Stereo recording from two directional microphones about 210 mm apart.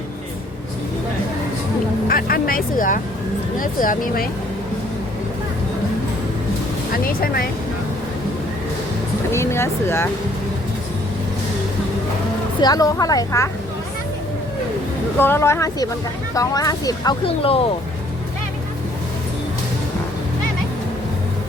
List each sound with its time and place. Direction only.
2.0 s speech: 45° left (ahead or behind)
6.9 s speech: 45° left (ahead or behind)
9.3 s speech: 10° left (ahead or behind)
12.5 s speech: 20° left (ahead or behind)
15.2 s speech: 10° left (ahead or behind); by 17.7 s 25° left (ahead or behind)